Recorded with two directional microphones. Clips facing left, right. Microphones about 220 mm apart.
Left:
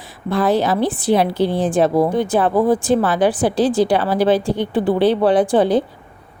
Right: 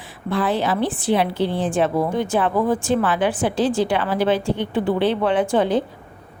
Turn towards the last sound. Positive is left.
turn(degrees=35)  # may be behind; listen again after turning